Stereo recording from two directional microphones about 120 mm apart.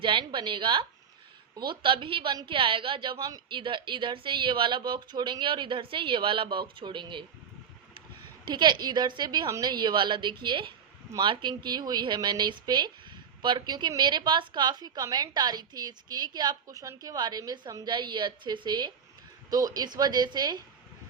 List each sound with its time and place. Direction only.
0.0 s a woman's voice: 40° right (ahead or behind)
8.4 s a woman's voice: 40° right (ahead or behind)